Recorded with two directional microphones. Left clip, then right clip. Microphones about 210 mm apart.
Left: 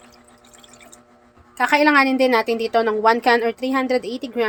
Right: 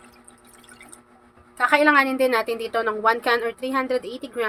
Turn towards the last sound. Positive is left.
turn(degrees=20)  # may be behind; listen again after turning